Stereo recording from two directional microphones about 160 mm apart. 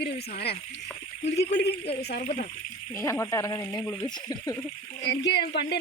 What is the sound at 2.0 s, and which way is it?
Sizzle, 90° left.